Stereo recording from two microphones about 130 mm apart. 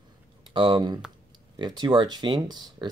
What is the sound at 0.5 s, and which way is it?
Speech, 40° right (ahead or behind).